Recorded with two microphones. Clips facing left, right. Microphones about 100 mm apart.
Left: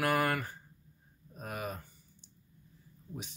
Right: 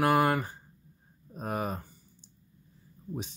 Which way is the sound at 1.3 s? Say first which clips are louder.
Right 7 dB; 35° right (ahead or behind).